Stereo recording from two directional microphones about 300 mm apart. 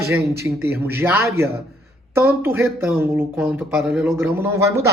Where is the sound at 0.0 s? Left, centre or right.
Centre.